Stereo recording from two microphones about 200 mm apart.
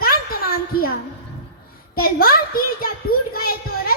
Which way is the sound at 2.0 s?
50° left (ahead or behind).